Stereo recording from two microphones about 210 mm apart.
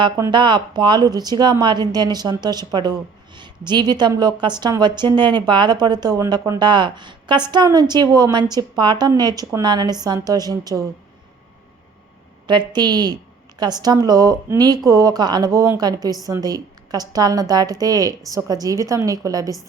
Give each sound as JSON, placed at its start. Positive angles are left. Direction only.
{"t": 0.0, "sound": "speech", "side_deg": -20}
{"t": 12.5, "sound": "a woman's voice", "side_deg": -20}